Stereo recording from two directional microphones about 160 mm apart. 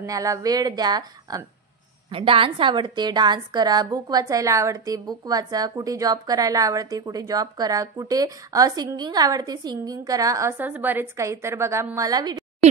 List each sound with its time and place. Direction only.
0.0 s a woman's voice: 20° right (ahead or behind)